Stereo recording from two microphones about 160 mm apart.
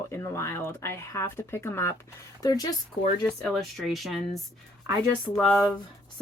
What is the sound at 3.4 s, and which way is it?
Speech, centre (ahead or behind).